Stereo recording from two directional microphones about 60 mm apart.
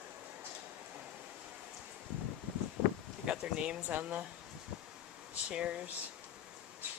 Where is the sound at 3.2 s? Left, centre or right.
Centre.